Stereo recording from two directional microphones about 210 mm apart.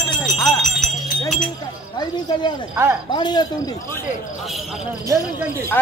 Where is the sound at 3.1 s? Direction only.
20° left (ahead or behind).